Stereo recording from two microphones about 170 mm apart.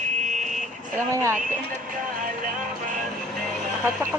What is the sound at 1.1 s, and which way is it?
Speech, 15° right (ahead or behind).